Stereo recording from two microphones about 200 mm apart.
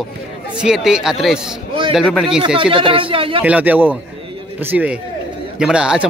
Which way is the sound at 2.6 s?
25° right (ahead or behind).